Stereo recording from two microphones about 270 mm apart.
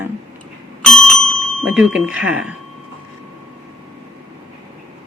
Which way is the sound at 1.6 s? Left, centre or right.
Centre.